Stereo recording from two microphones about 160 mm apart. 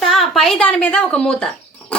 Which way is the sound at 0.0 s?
Centre (ahead or behind).